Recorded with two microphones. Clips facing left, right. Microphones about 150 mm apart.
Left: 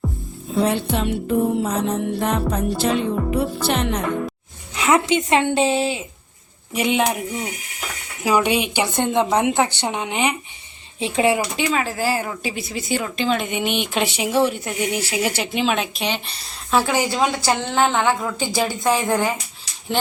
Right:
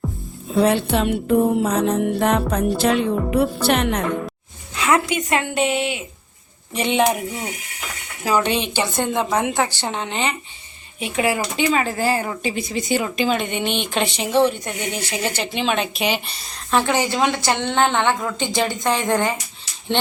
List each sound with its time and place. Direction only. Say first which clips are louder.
0.5 s music: right 3 dB; 70° right (ahead or behind)
4.7 s a woman's voice: left 2 dB; 20° left (ahead or behind)
6.7 s speech: right 1 dB; 5° left (ahead or behind)
8.2 s a woman's voice: left 1 dB; 10° left (ahead or behind)
11.0 s a woman's voice: left 3 dB; 25° left (ahead or behind)
11.5 s speech: right 2 dB; centre (ahead or behind)
16.7 s speech: even; 5° left (ahead or behind)